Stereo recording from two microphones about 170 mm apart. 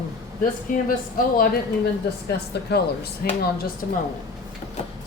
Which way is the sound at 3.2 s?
65° left (ahead or behind).